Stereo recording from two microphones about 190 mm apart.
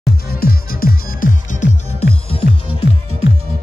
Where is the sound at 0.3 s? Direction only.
50° left (ahead or behind).